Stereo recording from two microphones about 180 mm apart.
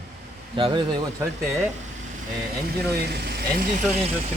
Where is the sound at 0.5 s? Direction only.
30° right (ahead or behind).